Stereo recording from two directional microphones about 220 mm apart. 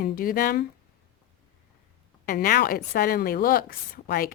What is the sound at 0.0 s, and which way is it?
Speech, 40° left (ahead or behind).